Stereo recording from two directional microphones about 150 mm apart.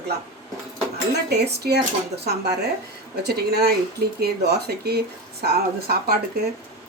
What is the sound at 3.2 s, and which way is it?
Speech, 90° right.